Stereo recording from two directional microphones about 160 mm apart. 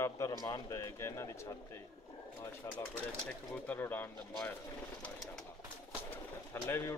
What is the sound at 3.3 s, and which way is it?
Speech, 10° left (ahead or behind).